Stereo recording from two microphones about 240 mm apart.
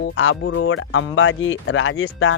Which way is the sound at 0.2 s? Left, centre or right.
Left.